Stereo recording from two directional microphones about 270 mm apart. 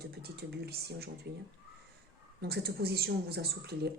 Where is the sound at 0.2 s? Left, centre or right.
Right.